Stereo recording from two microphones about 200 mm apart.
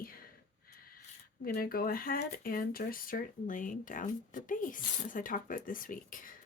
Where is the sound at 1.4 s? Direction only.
45° left (ahead or behind).